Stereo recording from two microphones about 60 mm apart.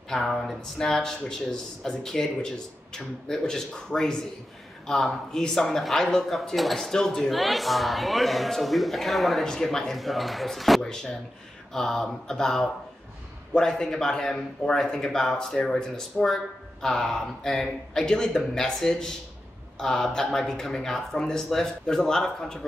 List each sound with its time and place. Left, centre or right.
0.1 s speech: centre